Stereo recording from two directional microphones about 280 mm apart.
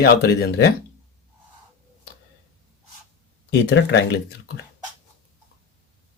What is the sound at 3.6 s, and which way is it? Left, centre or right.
Speech, left.